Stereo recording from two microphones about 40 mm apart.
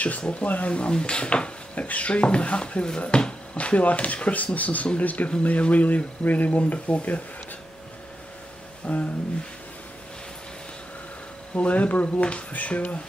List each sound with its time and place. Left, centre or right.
0.2 s speech: left
3.5 s speech: left
8.9 s speech: left
11.5 s speech: left